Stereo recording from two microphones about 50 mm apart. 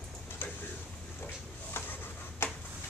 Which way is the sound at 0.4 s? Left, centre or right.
Left.